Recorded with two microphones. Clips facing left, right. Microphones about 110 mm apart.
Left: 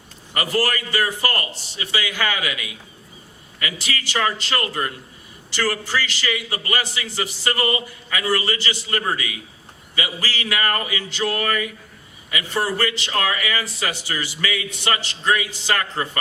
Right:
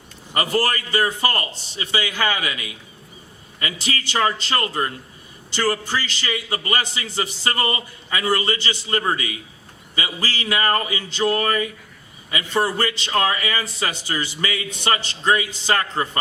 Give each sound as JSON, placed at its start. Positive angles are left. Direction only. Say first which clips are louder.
{"t": 0.3, "sound": "a man's voice", "louder": "right 1 dB", "side_deg": -30}